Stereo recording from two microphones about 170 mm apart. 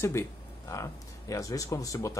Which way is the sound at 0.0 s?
15° left (ahead or behind).